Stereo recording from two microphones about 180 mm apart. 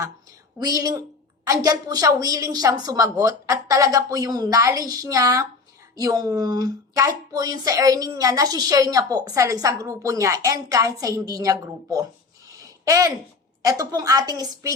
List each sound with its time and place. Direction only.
0.6 s a woman's voice: 20° right (ahead or behind)